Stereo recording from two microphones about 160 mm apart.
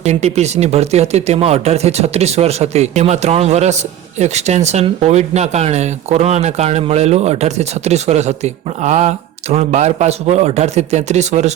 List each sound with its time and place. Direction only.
0.0 s speech: 45° right (ahead or behind)